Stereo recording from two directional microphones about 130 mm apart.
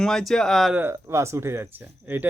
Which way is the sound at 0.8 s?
20° right (ahead or behind).